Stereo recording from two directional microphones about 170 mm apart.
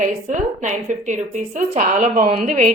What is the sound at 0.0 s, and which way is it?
A woman's voice, 45° right (ahead or behind).